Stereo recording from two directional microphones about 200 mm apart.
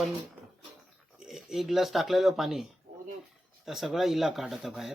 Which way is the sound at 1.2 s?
5° right (ahead or behind).